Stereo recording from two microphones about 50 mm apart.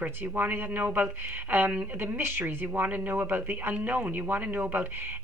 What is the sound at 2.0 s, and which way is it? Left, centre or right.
Speech, right.